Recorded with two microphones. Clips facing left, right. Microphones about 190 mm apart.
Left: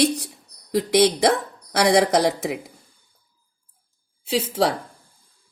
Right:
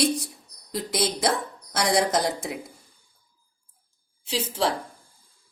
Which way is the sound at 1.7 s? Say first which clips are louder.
Left 6 dB; 70° left (ahead or behind).